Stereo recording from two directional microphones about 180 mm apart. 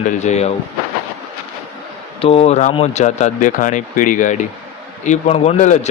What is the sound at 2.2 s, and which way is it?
Speech, 35° left (ahead or behind).